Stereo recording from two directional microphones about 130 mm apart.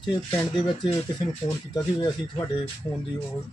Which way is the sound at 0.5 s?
35° left (ahead or behind).